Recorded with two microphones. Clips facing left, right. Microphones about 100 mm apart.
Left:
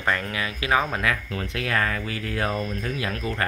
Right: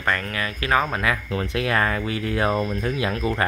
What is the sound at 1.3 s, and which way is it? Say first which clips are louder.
Speech: right 5 dB; 30° right (ahead or behind).